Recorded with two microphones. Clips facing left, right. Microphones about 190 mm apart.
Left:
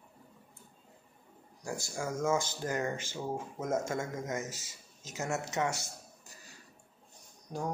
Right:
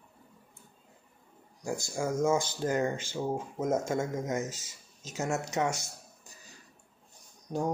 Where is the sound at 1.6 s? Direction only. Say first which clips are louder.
Right 5 dB; 15° right (ahead or behind).